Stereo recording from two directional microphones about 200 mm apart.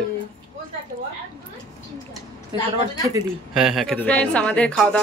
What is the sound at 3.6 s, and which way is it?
Speech, centre (ahead or behind).